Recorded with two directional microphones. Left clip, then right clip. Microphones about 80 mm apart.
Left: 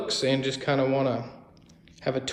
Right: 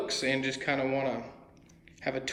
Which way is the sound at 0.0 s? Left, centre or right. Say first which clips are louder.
Left 4 dB; centre.